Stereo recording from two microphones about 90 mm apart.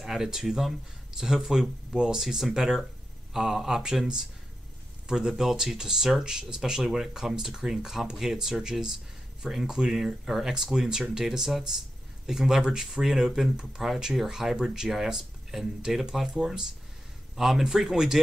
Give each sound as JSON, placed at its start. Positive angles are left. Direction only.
{"t": 0.0, "sound": "speech", "side_deg": -5}